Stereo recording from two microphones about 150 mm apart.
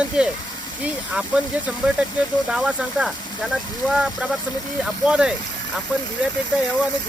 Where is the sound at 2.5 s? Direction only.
5° right (ahead or behind).